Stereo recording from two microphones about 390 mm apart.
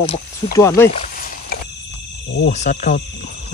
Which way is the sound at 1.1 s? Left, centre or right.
Left.